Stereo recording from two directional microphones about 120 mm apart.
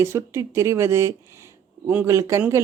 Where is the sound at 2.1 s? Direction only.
25° right (ahead or behind).